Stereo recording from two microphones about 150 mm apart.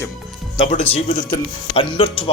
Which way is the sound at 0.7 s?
60° left (ahead or behind).